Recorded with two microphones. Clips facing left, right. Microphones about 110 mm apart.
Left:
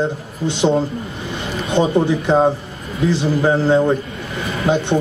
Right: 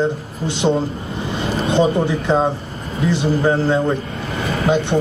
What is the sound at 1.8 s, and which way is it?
Speech, 20° left (ahead or behind).